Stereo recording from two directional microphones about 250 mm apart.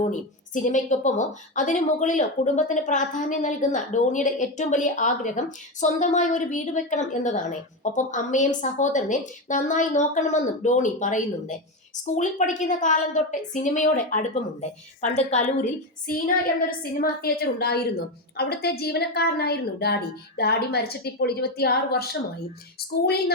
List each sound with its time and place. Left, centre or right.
0.1 s a woman's voice: left